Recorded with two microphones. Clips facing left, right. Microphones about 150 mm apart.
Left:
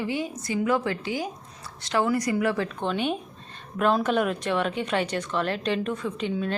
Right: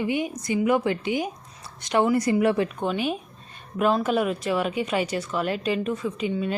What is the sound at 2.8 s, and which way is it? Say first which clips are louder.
Speech: right 1 dB; 5° right (ahead or behind).